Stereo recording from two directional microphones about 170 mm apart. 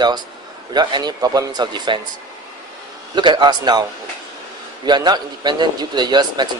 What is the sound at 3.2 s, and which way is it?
Speech, 25° right (ahead or behind).